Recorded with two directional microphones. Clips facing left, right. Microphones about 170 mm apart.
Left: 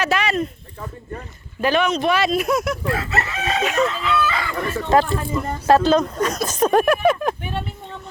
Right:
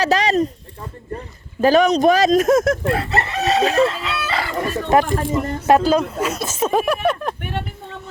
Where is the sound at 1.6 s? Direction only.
40° right (ahead or behind).